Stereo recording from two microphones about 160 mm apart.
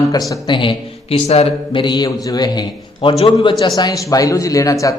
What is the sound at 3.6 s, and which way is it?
A man's voice, 25° left (ahead or behind).